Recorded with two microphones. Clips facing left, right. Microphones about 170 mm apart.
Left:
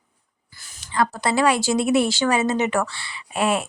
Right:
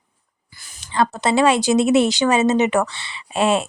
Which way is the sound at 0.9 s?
25° right (ahead or behind).